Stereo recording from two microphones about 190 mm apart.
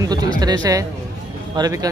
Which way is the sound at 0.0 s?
20° right (ahead or behind).